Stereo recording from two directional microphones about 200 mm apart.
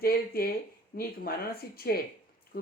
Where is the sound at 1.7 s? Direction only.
50° left (ahead or behind).